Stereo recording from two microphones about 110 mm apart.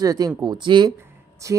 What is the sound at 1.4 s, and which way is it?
Speech, 30° right (ahead or behind).